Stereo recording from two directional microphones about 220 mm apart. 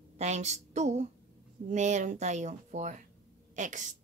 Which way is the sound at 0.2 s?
30° right (ahead or behind).